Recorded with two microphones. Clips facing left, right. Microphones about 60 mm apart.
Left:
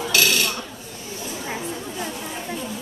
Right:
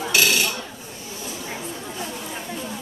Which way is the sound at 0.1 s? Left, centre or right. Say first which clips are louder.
Even; centre.